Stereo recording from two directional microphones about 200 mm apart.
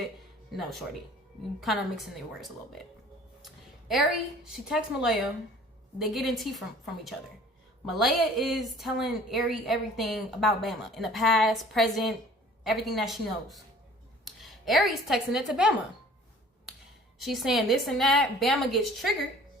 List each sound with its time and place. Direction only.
0.5 s a woman's voice: centre (ahead or behind)
3.4 s a sound: centre (ahead or behind)
4.4 s a woman's voice: centre (ahead or behind)
7.9 s a woman's voice: centre (ahead or behind)
17.2 s a woman's voice: centre (ahead or behind)